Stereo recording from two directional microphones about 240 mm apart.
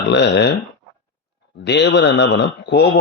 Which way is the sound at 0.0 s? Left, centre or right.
Left.